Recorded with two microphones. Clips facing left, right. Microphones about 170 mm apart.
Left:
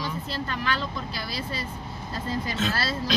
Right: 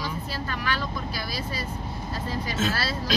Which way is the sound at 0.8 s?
25° left (ahead or behind).